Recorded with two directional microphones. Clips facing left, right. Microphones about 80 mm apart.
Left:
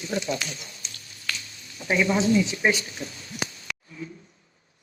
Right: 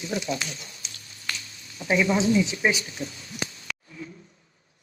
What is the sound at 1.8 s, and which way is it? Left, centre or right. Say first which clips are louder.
Speech: even; centre.